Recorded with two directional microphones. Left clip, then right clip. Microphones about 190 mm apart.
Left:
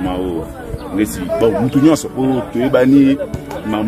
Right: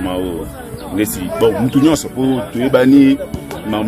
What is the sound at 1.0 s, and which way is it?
A man's voice, 25° right (ahead or behind).